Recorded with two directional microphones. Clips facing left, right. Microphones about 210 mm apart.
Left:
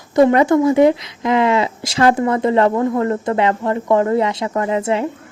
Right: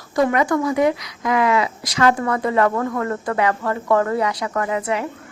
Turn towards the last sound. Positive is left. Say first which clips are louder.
# left 4 dB
turn(degrees=25)  # may be behind; listen again after turning